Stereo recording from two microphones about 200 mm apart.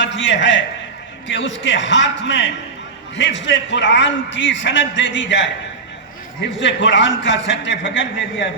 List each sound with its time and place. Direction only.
0.0 s a man's voice: 65° left (ahead or behind)
6.6 s a man's voice: 65° left (ahead or behind)